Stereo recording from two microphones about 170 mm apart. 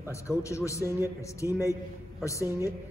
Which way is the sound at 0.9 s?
15° right (ahead or behind).